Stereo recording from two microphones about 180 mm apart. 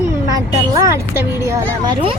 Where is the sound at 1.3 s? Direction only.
15° right (ahead or behind).